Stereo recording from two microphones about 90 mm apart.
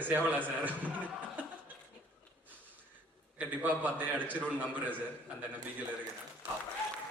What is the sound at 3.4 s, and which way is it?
A man's voice, 20° right (ahead or behind).